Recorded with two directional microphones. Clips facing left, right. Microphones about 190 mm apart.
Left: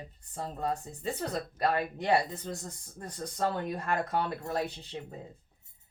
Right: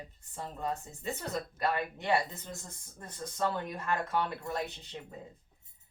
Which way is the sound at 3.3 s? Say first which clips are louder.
Left 2 dB; 35° left (ahead or behind).